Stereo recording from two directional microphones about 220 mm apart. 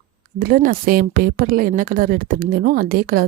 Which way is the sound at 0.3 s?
40° right (ahead or behind).